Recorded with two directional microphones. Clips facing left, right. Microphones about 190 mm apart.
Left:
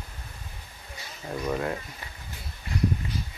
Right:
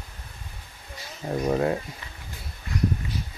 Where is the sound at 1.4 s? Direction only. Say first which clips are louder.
Right 5 dB; 30° right (ahead or behind).